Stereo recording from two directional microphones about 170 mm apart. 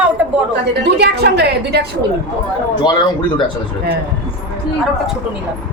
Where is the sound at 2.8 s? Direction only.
25° left (ahead or behind).